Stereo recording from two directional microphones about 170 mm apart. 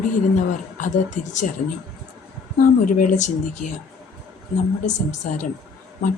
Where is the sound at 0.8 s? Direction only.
45° left (ahead or behind).